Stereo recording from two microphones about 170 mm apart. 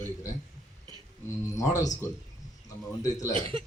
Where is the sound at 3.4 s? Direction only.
30° right (ahead or behind).